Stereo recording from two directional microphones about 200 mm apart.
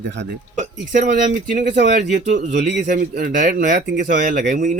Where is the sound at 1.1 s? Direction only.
40° right (ahead or behind).